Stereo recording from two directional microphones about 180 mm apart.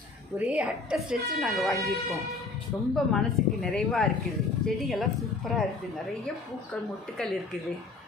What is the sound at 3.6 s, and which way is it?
A woman's voice, centre (ahead or behind).